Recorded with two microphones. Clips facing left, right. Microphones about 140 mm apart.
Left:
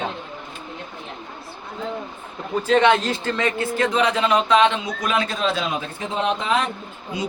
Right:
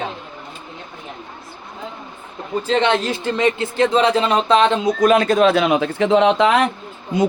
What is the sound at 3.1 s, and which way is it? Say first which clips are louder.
Speech: right 4 dB; 15° right (ahead or behind).